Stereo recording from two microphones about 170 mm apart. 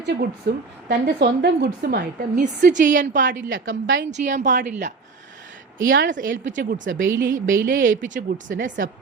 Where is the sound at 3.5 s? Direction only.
90° right.